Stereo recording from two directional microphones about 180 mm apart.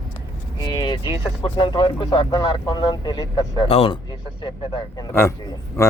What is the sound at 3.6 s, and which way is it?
A man's voice, 35° left (ahead or behind).